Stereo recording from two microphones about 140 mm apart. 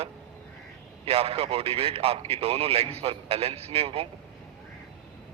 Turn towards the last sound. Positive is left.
turn(degrees=-45)  # may be behind; listen again after turning